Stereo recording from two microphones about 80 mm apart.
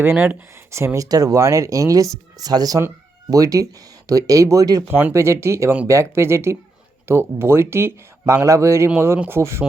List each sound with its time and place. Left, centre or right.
0.0 s speech: right
0.9 s speech: right
4.9 s speech: right
5.1 s speech: right